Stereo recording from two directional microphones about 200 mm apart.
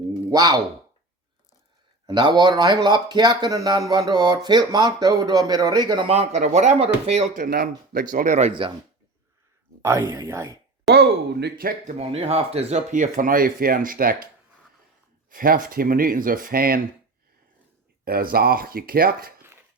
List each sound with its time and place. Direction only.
0.3 s speech: 20° right (ahead or behind)
2.0 s speech: 20° right (ahead or behind)
7.3 s speech: 45° right (ahead or behind); by 8.7 s 30° right (ahead or behind)
9.8 s speech: 15° right (ahead or behind)
10.9 s speech: 55° right (ahead or behind)
11.9 s speech: 30° right (ahead or behind)
15.3 s speech: 45° right (ahead or behind)
18.0 s speech: 45° right (ahead or behind)